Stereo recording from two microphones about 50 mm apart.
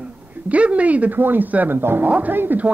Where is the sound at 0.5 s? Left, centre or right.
Right.